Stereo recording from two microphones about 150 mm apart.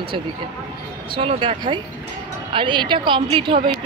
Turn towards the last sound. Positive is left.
turn(degrees=-35)  # may be behind; listen again after turning